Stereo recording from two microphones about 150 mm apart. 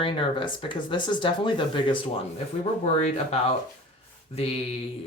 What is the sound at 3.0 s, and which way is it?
Mantra, 50° left (ahead or behind).